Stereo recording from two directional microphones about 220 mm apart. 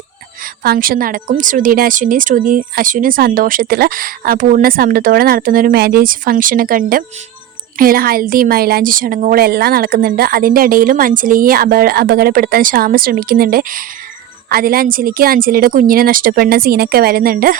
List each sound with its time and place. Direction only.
0.4 s a woman's voice: 40° right (ahead or behind)